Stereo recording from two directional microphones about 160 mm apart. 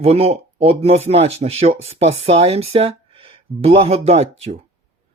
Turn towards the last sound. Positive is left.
turn(degrees=-40)  # may be behind; listen again after turning